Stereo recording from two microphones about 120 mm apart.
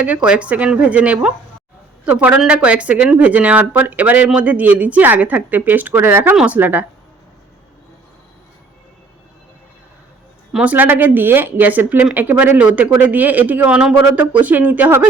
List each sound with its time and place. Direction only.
0.0 s speech: 10° right (ahead or behind)
10.5 s speech: 10° right (ahead or behind)